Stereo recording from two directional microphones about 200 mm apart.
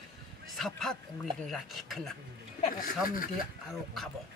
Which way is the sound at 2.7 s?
45° left (ahead or behind).